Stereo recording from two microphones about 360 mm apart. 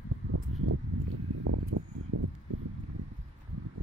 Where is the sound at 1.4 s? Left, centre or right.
Right.